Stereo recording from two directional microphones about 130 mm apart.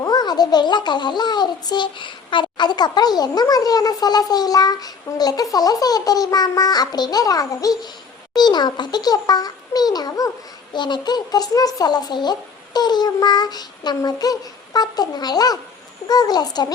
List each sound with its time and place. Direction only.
0.0 s a child's voice: 30° left (ahead or behind)